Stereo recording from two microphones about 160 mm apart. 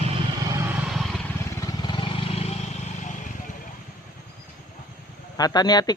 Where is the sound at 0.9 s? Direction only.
Centre (ahead or behind).